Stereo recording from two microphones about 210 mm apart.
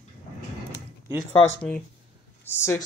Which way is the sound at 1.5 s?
5° left (ahead or behind).